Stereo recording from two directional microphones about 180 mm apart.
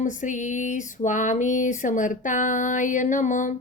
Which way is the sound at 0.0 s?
45° left (ahead or behind).